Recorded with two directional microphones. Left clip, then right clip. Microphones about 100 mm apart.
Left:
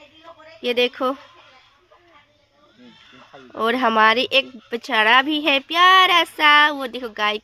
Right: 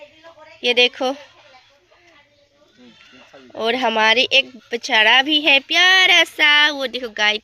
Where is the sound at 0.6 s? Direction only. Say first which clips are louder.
Right 4 dB; 15° left (ahead or behind).